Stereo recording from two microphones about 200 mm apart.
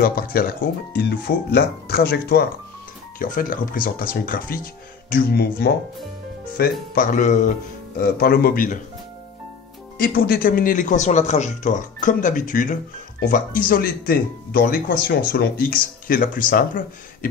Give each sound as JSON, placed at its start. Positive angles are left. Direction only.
{"t": 0.0, "sound": "speech", "side_deg": 50}
{"t": 7.0, "sound": "speech", "side_deg": 40}
{"t": 8.2, "sound": "speech", "side_deg": 50}
{"t": 9.9, "sound": "speech", "side_deg": 45}